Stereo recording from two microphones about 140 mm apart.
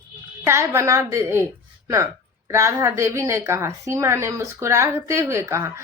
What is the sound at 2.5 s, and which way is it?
Speech, 20° right (ahead or behind).